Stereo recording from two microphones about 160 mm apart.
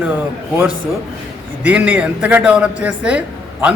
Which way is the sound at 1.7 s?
10° right (ahead or behind).